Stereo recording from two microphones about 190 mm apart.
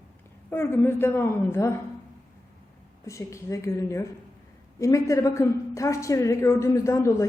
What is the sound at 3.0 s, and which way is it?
A woman's voice, 15° left (ahead or behind).